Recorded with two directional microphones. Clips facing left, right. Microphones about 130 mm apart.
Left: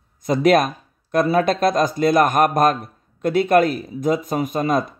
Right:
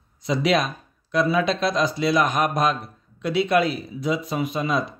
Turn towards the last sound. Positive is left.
turn(degrees=45)  # may be behind; listen again after turning